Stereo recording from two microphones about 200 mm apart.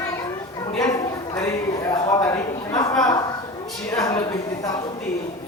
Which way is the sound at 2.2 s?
15° left (ahead or behind).